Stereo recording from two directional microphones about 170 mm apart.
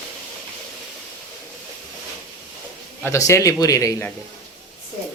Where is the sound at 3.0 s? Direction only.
15° left (ahead or behind).